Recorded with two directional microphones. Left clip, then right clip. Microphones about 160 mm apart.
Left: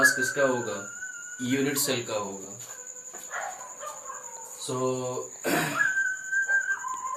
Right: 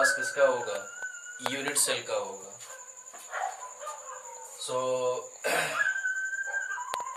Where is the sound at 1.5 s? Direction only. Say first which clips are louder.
Left 4 dB; 5° right (ahead or behind).